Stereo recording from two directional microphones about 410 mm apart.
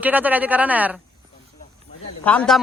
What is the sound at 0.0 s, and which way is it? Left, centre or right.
Speech, centre.